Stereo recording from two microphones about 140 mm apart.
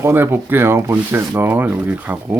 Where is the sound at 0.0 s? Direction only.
15° right (ahead or behind).